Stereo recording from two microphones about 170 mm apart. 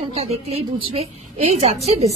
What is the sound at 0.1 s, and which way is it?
A woman's voice, 35° right (ahead or behind).